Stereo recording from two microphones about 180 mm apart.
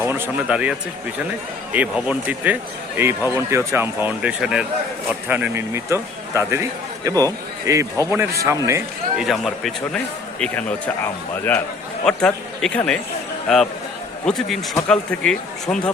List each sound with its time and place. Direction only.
0.0 s a man's voice: 15° right (ahead or behind)
9.1 s speech: centre (ahead or behind)